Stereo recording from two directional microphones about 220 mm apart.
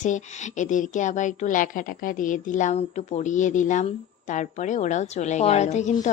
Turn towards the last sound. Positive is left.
turn(degrees=30)  # may be behind; listen again after turning